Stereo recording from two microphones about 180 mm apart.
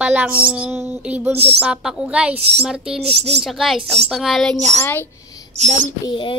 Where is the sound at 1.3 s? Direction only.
35° right (ahead or behind).